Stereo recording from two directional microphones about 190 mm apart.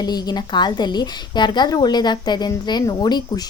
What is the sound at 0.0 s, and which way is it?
Speech, 20° left (ahead or behind).